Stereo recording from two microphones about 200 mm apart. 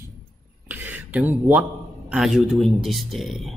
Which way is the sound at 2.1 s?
Centre (ahead or behind).